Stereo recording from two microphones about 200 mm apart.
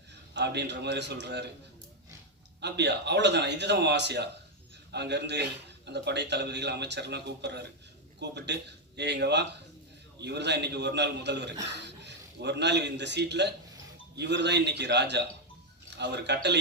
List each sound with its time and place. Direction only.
0.3 s a man's voice: 60° right (ahead or behind)
2.6 s a man's voice: 60° right (ahead or behind)